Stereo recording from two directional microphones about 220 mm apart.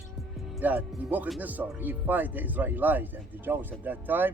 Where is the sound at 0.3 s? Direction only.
5° right (ahead or behind).